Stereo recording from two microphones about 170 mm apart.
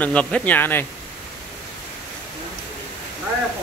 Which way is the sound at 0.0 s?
5° left (ahead or behind).